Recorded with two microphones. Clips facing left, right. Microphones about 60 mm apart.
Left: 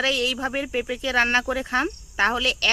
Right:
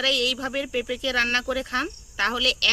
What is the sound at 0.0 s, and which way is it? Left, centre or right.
Speech, left.